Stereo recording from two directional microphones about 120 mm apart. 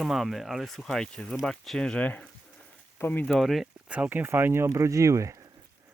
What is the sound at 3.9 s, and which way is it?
Speech, 15° right (ahead or behind).